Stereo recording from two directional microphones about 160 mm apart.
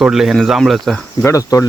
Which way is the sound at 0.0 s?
Centre (ahead or behind).